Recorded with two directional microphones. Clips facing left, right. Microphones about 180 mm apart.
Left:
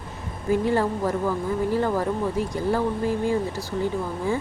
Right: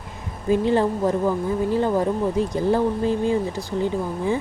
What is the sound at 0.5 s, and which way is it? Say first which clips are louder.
Speech: right 3 dB; 20° right (ahead or behind).